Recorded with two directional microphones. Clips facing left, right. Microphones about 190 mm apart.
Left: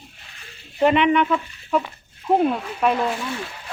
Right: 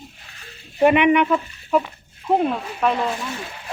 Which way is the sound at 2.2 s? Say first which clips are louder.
Left 1 dB; 5° left (ahead or behind).